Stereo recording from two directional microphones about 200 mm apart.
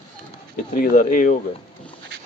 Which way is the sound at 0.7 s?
45° left (ahead or behind).